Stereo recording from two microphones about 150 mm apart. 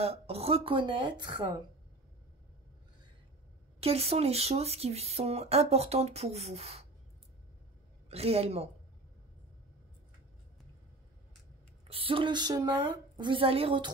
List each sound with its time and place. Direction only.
0.0 s a woman's voice: 40° right (ahead or behind)
3.8 s speech: 40° right (ahead or behind)
8.1 s speech: 40° right (ahead or behind)
11.9 s a woman's voice: 35° right (ahead or behind)